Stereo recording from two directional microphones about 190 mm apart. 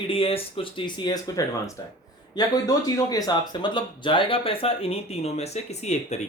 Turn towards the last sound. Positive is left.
turn(degrees=35)  # may be behind; listen again after turning